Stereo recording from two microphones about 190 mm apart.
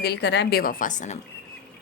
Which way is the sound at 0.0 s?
60° left (ahead or behind).